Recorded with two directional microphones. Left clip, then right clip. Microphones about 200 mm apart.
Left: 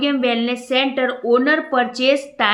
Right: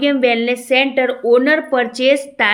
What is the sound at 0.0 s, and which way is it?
Speech, 25° right (ahead or behind).